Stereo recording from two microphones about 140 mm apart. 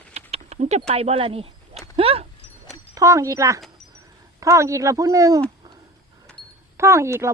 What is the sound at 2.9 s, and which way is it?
A woman's voice, 25° right (ahead or behind).